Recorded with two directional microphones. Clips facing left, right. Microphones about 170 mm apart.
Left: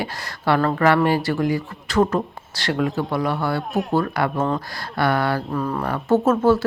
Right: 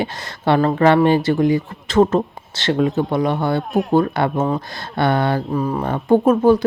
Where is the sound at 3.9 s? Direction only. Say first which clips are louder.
Right 4 dB; 25° right (ahead or behind).